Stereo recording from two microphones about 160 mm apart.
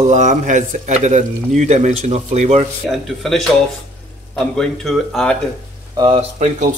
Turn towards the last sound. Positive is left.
turn(degrees=-50)  # may be behind; listen again after turning